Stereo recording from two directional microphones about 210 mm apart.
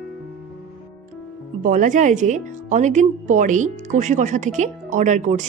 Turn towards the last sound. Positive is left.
turn(degrees=-35)  # may be behind; listen again after turning